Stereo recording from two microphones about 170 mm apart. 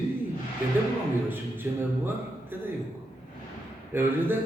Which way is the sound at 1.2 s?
10° right (ahead or behind).